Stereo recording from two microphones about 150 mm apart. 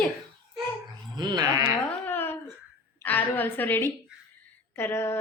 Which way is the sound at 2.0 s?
15° left (ahead or behind).